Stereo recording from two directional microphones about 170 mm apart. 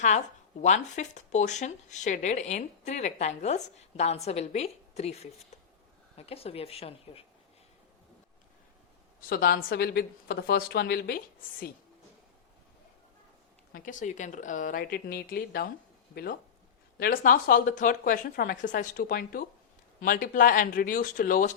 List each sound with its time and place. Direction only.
0.6 s speech: 45° left (ahead or behind)
9.3 s a woman's voice: 60° left (ahead or behind)
13.7 s speech: 50° left (ahead or behind)